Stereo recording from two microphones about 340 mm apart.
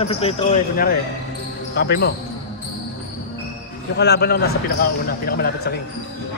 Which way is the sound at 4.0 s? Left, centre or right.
Left.